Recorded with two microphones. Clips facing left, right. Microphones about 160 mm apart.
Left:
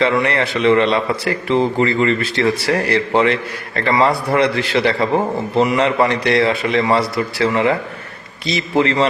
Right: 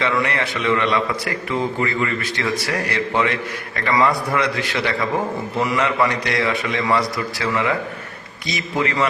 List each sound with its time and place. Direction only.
0.0 s a man's voice: 30° left (ahead or behind)